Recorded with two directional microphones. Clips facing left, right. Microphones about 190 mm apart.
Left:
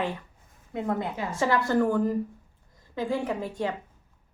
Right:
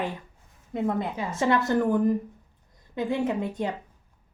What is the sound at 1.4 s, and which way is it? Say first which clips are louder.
A woman's voice: right 1 dB; 20° right (ahead or behind).